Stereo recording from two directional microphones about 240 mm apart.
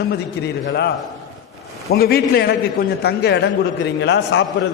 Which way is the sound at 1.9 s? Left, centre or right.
Left.